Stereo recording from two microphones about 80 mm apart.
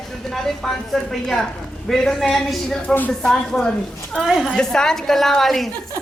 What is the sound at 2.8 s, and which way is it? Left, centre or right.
Speech, left.